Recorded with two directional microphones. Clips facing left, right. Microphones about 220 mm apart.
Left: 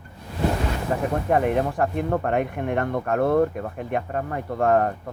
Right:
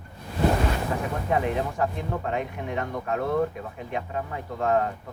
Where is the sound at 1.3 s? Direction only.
55° left (ahead or behind).